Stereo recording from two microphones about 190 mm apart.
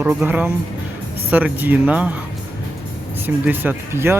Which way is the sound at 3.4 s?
10° right (ahead or behind).